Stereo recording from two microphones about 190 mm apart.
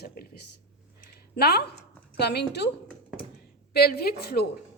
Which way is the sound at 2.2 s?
60° left (ahead or behind).